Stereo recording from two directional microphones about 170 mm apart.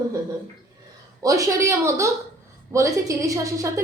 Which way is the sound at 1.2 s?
20° right (ahead or behind).